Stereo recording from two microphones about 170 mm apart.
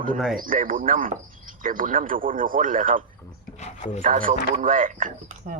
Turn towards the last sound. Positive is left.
turn(degrees=-55)  # may be behind; listen again after turning